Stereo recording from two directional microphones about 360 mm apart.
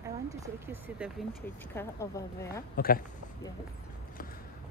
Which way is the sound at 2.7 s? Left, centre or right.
Left.